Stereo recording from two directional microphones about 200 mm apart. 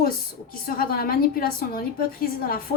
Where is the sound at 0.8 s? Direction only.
45° left (ahead or behind).